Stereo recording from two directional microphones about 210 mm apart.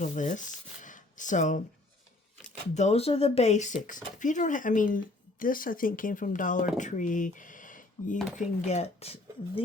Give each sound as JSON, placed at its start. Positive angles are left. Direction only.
{"t": 0.0, "sound": "speech", "side_deg": 35}
{"t": 2.7, "sound": "speech", "side_deg": 30}